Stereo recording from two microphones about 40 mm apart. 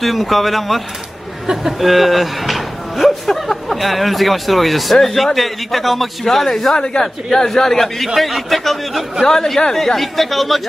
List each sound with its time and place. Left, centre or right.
0.0 s a man's voice: centre
6.7 s a woman's voice: left
7.3 s a man's voice: centre
9.2 s a man's voice: centre